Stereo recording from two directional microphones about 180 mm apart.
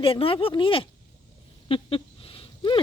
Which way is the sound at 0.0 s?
30° left (ahead or behind).